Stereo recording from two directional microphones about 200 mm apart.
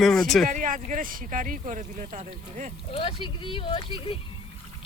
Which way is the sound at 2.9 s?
25° left (ahead or behind).